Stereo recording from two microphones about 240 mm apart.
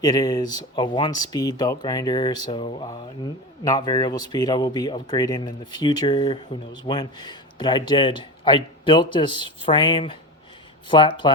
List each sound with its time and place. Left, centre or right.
0.0 s speech: centre